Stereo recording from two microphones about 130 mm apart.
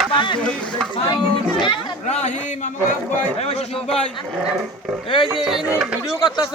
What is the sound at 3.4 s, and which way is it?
Speech, 50° left (ahead or behind).